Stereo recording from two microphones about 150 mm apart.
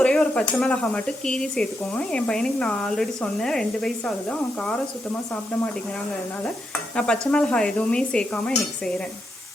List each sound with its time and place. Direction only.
0.0 s speech: 5° left (ahead or behind)
6.9 s dishes: 5° left (ahead or behind)